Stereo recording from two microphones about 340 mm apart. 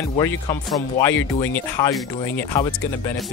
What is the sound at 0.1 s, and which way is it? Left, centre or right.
Speech, centre.